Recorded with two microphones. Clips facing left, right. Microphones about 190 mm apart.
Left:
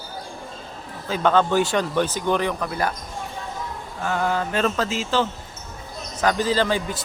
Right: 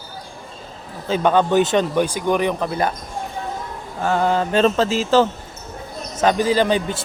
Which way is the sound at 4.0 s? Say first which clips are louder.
Right 5 dB; 30° right (ahead or behind).